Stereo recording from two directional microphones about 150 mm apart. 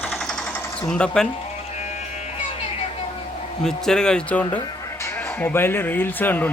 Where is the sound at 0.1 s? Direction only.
5° left (ahead or behind).